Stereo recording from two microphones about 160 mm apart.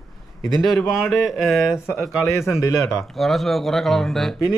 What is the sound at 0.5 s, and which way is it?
Speech, centre (ahead or behind).